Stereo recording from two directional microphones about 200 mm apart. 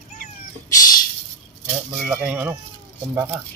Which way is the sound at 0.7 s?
20° left (ahead or behind).